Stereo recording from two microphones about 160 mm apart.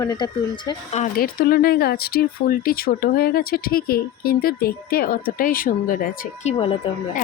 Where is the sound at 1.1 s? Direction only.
70° left (ahead or behind).